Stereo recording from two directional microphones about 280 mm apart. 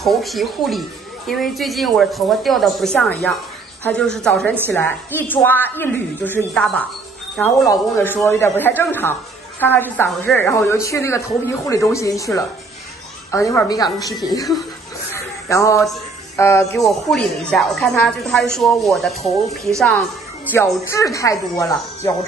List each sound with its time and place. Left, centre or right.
0.0 s a woman's voice: centre
13.3 s a woman's voice: centre
15.1 s a sound: centre
16.3 s a woman's voice: centre